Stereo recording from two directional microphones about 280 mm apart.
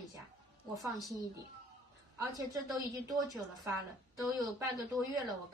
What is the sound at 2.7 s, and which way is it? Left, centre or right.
Speech, centre.